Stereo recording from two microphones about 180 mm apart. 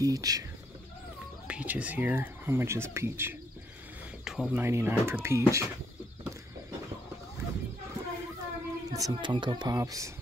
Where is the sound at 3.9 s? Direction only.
5° right (ahead or behind).